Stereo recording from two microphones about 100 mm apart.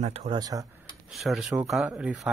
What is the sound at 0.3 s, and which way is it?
Speech, 35° right (ahead or behind).